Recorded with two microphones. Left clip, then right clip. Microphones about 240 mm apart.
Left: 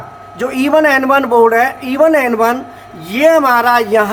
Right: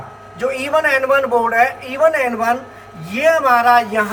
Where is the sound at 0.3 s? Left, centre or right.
Left.